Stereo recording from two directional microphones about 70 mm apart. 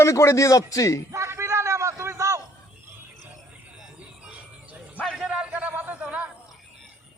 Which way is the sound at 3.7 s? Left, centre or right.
Centre.